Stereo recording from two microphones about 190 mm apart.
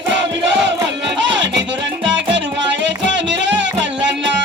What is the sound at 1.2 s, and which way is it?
Music, 70° right (ahead or behind).